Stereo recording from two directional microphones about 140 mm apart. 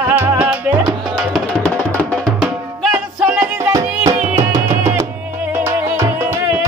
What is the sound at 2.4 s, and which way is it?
Music, 5° right (ahead or behind).